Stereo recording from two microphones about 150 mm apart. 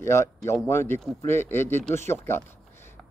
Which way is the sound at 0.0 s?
20° left (ahead or behind).